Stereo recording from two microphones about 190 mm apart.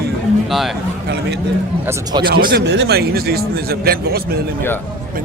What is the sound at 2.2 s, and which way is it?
Speech, 50° right (ahead or behind).